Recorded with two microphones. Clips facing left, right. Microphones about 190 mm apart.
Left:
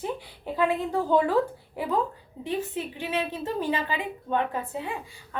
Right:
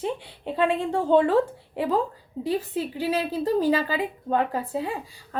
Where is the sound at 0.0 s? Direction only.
25° right (ahead or behind).